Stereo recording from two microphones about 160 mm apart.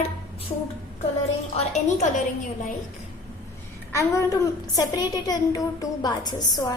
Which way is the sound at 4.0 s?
20° left (ahead or behind).